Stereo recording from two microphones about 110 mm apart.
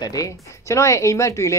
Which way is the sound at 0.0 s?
30° left (ahead or behind).